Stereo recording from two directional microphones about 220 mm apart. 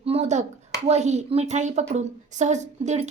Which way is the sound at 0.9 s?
30° right (ahead or behind).